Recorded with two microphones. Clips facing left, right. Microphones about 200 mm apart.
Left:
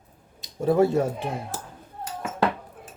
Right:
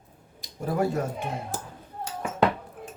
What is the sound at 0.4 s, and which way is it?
Speech, 25° left (ahead or behind).